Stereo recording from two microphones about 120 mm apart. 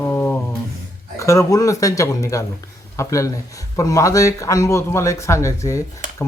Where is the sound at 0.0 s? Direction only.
15° left (ahead or behind).